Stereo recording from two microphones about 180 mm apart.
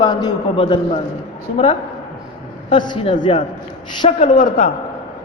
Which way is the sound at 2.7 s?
25° left (ahead or behind).